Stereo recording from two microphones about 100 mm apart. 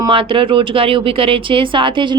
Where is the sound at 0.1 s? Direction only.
60° right (ahead or behind).